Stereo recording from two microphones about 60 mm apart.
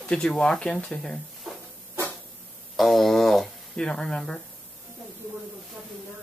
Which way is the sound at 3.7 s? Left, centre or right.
Centre.